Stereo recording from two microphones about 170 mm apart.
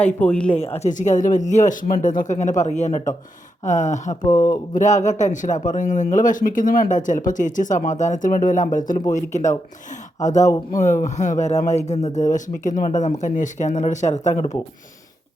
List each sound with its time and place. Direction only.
0.2 s speech: 5° left (ahead or behind)
0.5 s speech: 35° left (ahead or behind)
4.3 s speech: 20° left (ahead or behind)
4.7 s speech: 45° left (ahead or behind)
10.7 s speech: 45° left (ahead or behind)